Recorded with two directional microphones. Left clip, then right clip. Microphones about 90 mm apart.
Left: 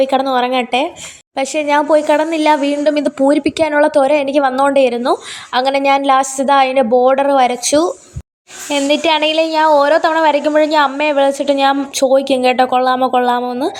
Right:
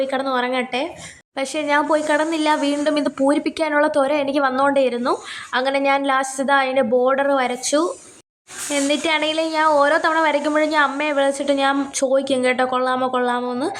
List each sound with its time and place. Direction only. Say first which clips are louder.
0.0 s a woman's voice: left 7 dB; 40° left (ahead or behind)
1.4 s a woman's voice: left 5 dB; 30° left (ahead or behind)